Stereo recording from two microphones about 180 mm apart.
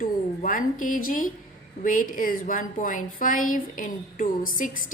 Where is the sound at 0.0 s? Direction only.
50° left (ahead or behind).